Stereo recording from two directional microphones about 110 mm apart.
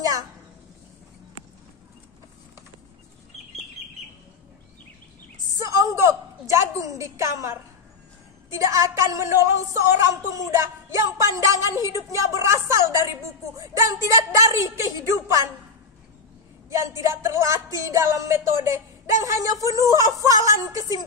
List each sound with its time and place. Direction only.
5.6 s a sound: 30° right (ahead or behind)
8.5 s a woman's voice: 25° right (ahead or behind)
16.7 s a woman's voice: 25° right (ahead or behind)